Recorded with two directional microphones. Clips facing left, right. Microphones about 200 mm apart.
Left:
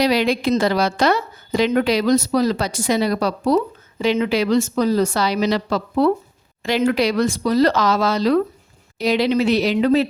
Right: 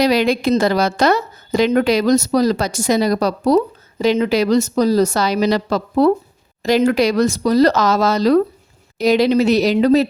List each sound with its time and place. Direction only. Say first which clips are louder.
0.0 s a woman's voice: right 3 dB; 45° right (ahead or behind)